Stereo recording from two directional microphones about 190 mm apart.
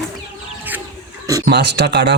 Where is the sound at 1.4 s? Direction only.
60° right (ahead or behind).